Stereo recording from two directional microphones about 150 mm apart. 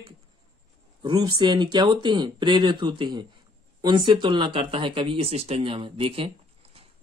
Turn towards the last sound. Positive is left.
turn(degrees=-40)  # may be behind; listen again after turning